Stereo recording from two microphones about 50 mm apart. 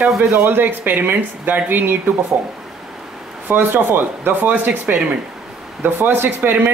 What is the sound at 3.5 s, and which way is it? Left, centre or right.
Speech, right.